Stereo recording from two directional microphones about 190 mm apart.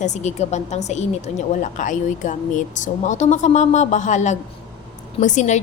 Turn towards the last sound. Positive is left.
turn(degrees=40)  # may be behind; listen again after turning